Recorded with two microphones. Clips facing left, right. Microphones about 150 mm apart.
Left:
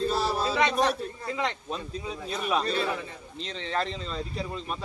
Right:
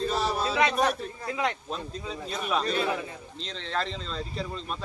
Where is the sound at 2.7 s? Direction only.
10° right (ahead or behind).